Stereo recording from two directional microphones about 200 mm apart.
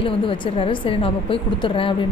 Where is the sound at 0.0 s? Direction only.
25° left (ahead or behind).